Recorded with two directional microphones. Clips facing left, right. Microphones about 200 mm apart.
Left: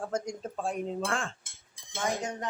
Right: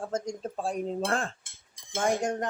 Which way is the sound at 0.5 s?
35° right (ahead or behind).